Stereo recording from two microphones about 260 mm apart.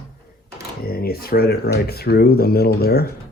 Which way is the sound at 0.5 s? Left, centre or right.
Left.